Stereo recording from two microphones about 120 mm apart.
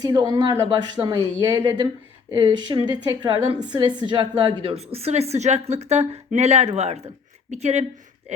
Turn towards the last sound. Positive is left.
turn(degrees=-70)  # may be behind; listen again after turning